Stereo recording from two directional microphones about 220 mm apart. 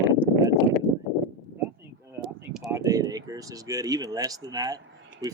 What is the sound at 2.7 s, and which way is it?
Speech, 15° right (ahead or behind).